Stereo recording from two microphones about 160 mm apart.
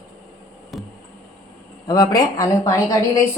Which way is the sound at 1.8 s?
25° left (ahead or behind).